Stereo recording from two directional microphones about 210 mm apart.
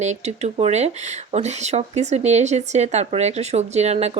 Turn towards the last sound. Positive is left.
turn(degrees=-30)  # may be behind; listen again after turning